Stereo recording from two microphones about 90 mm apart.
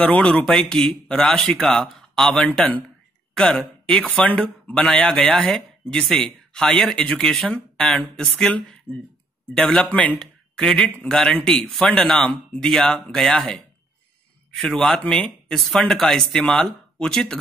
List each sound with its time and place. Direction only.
0.0 s speech: 15° left (ahead or behind)
2.5 s a man's voice: 15° left (ahead or behind)